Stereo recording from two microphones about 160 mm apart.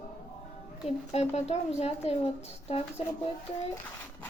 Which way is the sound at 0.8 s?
40° left (ahead or behind).